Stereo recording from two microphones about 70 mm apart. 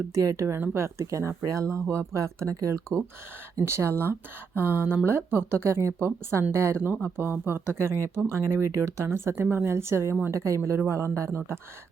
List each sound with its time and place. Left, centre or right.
0.1 s speech: right